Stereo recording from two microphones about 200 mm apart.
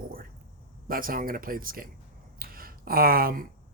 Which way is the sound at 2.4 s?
45° right (ahead or behind).